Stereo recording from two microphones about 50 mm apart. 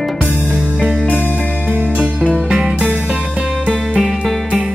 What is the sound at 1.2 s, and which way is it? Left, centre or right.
Music, right.